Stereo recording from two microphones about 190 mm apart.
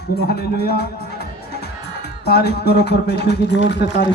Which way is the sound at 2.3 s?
60° left (ahead or behind).